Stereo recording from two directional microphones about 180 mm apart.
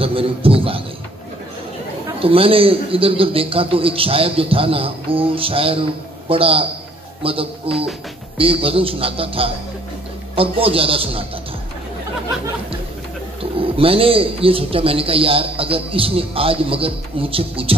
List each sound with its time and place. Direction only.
0.0 s a man's voice: 30° right (ahead or behind)
2.1 s a man's voice: 30° right (ahead or behind)
13.4 s a man's voice: 30° right (ahead or behind)